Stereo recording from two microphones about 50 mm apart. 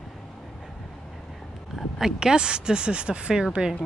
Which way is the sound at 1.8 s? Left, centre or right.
Centre.